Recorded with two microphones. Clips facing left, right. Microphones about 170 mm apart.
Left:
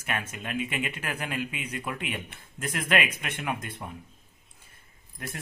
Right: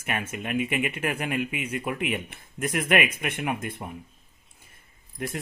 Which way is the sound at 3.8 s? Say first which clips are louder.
Right 2 dB; 25° right (ahead or behind).